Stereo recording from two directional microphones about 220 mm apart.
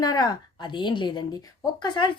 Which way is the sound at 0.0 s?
20° left (ahead or behind).